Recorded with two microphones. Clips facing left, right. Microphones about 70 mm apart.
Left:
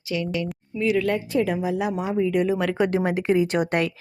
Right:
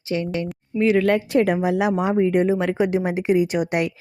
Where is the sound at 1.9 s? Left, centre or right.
Right.